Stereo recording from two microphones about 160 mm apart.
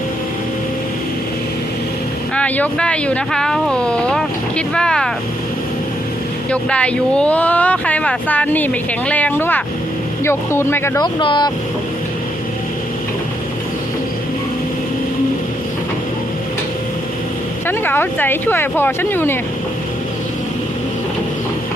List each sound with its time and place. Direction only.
2.3 s speech: 10° left (ahead or behind)
6.5 s speech: 5° left (ahead or behind)
11.0 s speech: 30° left (ahead or behind)
17.7 s speech: 15° left (ahead or behind)